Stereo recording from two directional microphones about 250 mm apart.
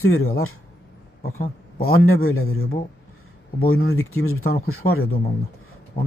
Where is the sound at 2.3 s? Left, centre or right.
Left.